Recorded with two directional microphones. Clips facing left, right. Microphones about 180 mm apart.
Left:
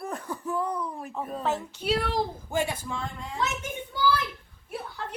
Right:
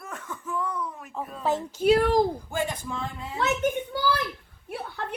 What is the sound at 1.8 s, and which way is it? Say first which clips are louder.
Speech: right 10 dB; 45° right (ahead or behind).